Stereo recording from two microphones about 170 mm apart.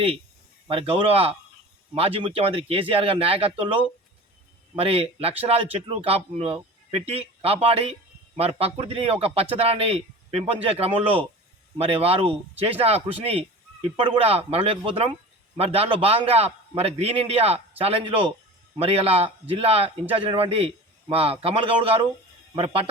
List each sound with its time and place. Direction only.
0.7 s a man's voice: 35° right (ahead or behind)